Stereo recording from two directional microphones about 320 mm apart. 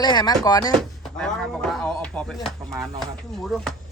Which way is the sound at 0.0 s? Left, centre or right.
Centre.